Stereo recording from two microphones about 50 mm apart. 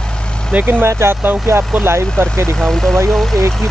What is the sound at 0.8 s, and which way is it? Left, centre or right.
Speech, right.